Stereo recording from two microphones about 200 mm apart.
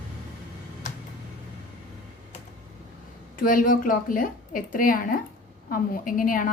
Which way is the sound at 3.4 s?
45° left (ahead or behind).